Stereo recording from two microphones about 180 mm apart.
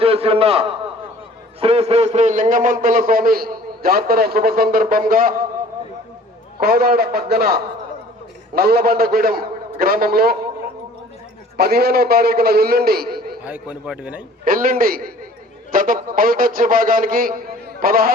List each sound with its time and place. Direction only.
0.0 s a man's voice: 30° right (ahead or behind)
1.6 s a man's voice: 35° right (ahead or behind); by 5.3 s 50° right (ahead or behind)
6.6 s a man's voice: 55° right (ahead or behind)
11.5 s a man's voice: 60° right (ahead or behind)
13.4 s a man's voice: 5° right (ahead or behind)
14.4 s a man's voice: 50° right (ahead or behind)